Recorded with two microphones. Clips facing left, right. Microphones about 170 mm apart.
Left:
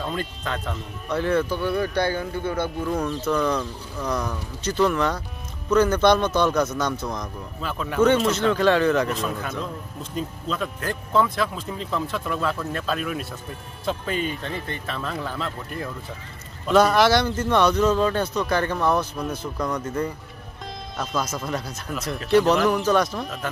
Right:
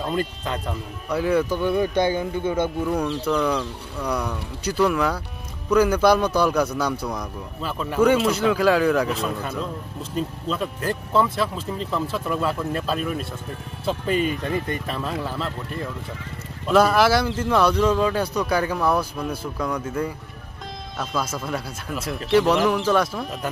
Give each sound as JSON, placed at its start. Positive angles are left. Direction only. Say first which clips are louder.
{"t": 0.0, "sound": "speech", "louder": "right 3 dB", "side_deg": 0}
{"t": 2.8, "sound": "speech", "louder": "right 2 dB", "side_deg": 0}
{"t": 4.6, "sound": "speech", "louder": "right 1 dB", "side_deg": -5}
{"t": 14.2, "sound": "speech", "louder": "right 5 dB", "side_deg": -10}
{"t": 16.6, "sound": "speech", "louder": "even", "side_deg": -5}